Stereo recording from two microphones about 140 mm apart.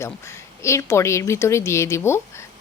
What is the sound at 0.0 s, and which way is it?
A woman's voice, 20° left (ahead or behind).